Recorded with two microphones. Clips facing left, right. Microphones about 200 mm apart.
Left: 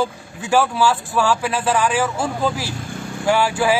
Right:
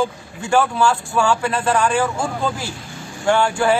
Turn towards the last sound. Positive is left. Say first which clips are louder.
# right 1 dB
turn(degrees=5)  # may be behind; listen again after turning